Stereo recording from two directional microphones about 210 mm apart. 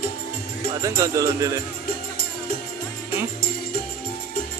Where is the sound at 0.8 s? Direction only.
15° right (ahead or behind).